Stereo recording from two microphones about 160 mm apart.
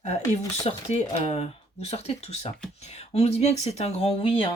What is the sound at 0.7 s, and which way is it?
Speech, 40° left (ahead or behind).